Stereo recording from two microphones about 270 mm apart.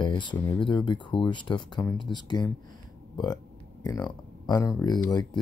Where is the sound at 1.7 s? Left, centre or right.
Centre.